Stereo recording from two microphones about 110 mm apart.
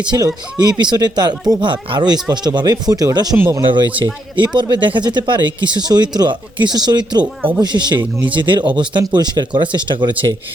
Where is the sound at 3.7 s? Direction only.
50° right (ahead or behind).